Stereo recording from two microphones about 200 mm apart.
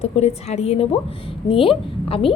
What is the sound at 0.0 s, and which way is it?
A woman's voice, 35° left (ahead or behind).